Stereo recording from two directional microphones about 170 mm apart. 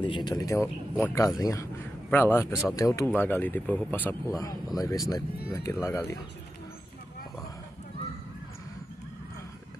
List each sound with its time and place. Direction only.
0.0 s speech: 25° left (ahead or behind)